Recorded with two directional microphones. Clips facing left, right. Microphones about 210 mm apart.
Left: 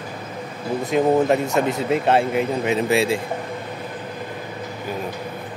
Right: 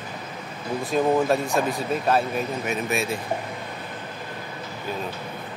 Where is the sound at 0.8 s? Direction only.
20° left (ahead or behind).